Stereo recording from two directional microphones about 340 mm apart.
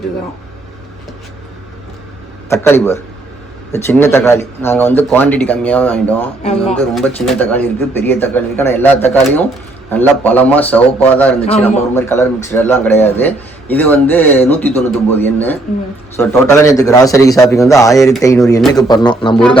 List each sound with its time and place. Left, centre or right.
2.5 s a man's voice: centre
6.4 s speech: centre
6.7 s a man's voice: centre